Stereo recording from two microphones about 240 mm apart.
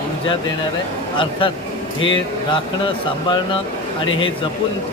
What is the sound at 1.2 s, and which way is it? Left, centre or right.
Speech, left.